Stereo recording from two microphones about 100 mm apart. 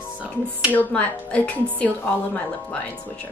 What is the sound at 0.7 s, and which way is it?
A woman's voice, 15° left (ahead or behind).